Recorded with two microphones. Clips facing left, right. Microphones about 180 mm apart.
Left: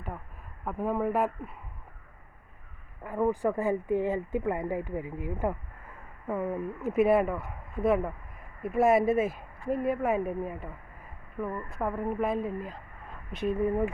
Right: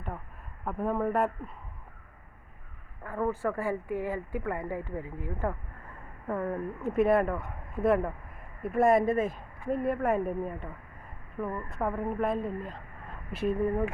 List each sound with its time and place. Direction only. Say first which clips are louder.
0.6 s speech: even; centre (ahead or behind)
3.0 s speech: left 3 dB; 15° left (ahead or behind); by 13.8 s 5° right (ahead or behind)